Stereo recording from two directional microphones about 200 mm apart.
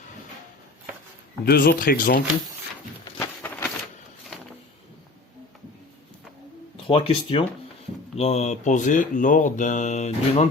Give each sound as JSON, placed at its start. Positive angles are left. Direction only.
{"t": 1.5, "sound": "speech", "side_deg": 50}
{"t": 3.0, "sound": "a sound", "side_deg": 10}
{"t": 6.8, "sound": "speech", "side_deg": 25}